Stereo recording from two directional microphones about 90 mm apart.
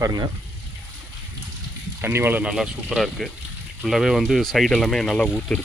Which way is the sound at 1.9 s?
25° right (ahead or behind).